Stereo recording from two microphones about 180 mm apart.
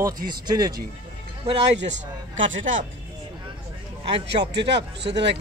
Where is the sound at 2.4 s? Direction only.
90° right.